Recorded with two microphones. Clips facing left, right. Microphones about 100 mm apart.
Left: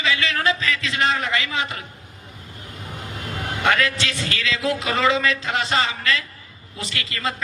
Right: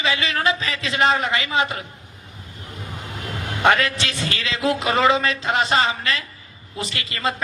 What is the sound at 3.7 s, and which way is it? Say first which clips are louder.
A man's voice: right 3 dB; 20° right (ahead or behind).